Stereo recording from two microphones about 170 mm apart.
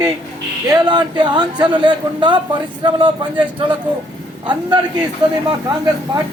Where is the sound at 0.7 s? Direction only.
25° right (ahead or behind).